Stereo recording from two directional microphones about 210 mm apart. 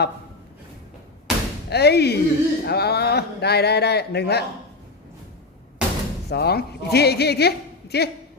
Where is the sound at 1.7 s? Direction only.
50° left (ahead or behind).